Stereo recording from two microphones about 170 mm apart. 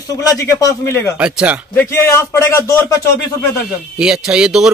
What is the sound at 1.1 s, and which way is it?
Speech, 5° right (ahead or behind).